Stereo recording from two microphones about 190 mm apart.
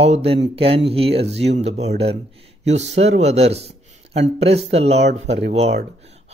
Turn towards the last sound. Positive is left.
turn(degrees=-35)  # may be behind; listen again after turning